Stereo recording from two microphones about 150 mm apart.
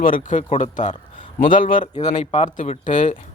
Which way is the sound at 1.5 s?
65° left (ahead or behind).